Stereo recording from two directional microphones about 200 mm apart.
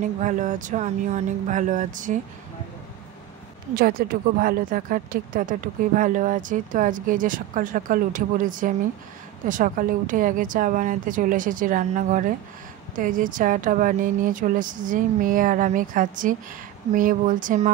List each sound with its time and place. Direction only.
0.2 s speech: 40° right (ahead or behind)
3.7 s speech: 45° right (ahead or behind)